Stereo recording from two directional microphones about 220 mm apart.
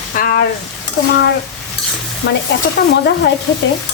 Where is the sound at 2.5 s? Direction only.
50° left (ahead or behind).